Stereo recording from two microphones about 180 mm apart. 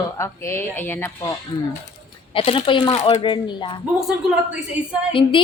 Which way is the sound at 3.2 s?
25° left (ahead or behind).